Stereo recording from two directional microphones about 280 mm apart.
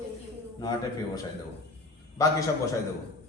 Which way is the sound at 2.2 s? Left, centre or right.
Centre.